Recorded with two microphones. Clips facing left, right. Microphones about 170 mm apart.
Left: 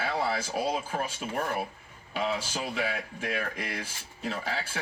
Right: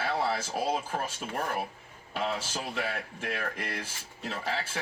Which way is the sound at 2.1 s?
Centre (ahead or behind).